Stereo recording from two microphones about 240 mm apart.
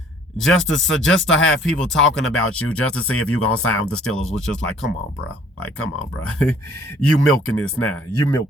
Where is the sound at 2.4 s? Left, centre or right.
Left.